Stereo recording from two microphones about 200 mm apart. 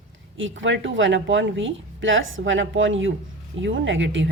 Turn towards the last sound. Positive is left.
turn(degrees=-65)  # may be behind; listen again after turning